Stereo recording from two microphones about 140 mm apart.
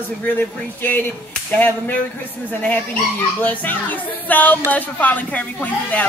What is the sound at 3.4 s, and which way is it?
Speech, 10° left (ahead or behind).